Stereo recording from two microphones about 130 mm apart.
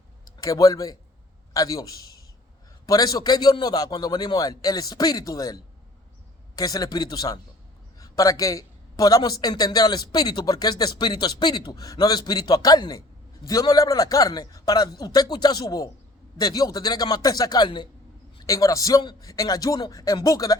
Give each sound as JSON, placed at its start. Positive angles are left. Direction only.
{"t": 0.3, "sound": "a man's voice", "side_deg": 25}